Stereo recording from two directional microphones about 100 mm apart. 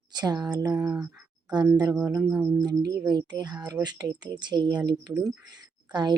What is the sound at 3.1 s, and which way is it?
A woman's voice, 45° right (ahead or behind).